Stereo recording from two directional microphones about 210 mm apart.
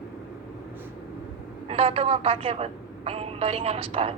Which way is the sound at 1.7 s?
30° right (ahead or behind).